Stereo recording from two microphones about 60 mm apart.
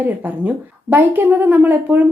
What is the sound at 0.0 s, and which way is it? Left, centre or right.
Speech, right.